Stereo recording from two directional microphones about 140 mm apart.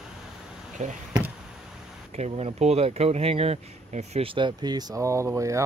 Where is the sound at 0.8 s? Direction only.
55° right (ahead or behind).